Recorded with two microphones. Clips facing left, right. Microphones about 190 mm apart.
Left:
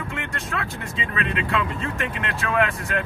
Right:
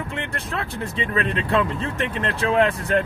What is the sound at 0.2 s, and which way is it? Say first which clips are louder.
Speech: right 1 dB; 30° right (ahead or behind).